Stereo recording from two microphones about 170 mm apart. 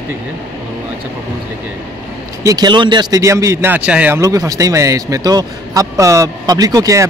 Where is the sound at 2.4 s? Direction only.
20° right (ahead or behind).